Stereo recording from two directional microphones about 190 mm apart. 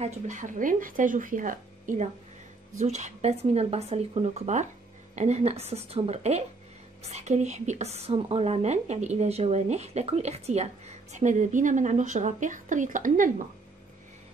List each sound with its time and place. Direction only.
0.0 s speech: 40° right (ahead or behind)